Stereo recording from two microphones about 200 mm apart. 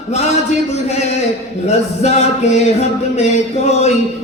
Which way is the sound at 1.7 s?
35° left (ahead or behind).